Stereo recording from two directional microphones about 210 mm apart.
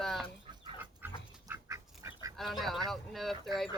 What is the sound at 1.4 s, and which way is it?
Duck, 15° right (ahead or behind).